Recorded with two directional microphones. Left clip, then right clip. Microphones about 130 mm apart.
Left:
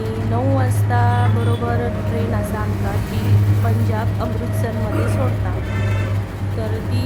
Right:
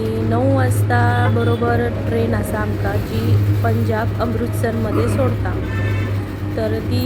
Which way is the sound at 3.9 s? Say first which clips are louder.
Right 4 dB; 20° right (ahead or behind).